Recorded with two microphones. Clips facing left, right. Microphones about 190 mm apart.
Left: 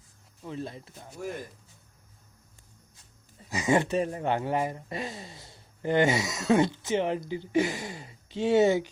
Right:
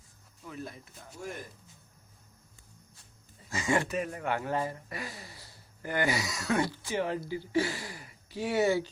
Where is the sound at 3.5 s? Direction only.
20° left (ahead or behind).